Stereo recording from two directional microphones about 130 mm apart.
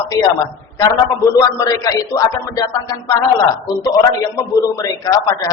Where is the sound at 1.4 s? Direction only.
25° left (ahead or behind).